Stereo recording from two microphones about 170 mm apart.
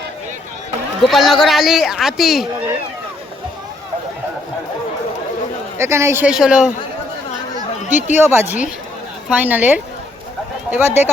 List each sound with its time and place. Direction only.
1.0 s speech: centre (ahead or behind)
5.7 s a man's voice: 15° right (ahead or behind)
6.3 s speech: 5° right (ahead or behind)
7.9 s speech: 45° left (ahead or behind)
8.2 s speech: 15° right (ahead or behind)